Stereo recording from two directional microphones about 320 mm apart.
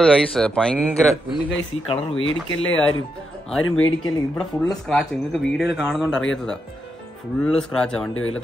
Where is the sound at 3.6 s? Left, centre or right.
Left.